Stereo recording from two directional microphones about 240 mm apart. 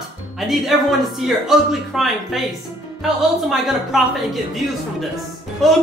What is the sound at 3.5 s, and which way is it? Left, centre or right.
A man's voice, centre.